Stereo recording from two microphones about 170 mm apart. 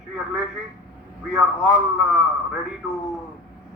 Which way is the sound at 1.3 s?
Centre (ahead or behind).